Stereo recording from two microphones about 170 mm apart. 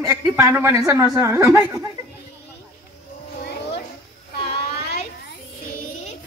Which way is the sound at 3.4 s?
80° left.